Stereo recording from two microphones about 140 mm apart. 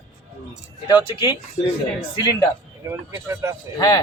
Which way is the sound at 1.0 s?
30° left (ahead or behind).